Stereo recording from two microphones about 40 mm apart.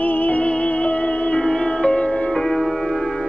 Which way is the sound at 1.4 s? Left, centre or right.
Left.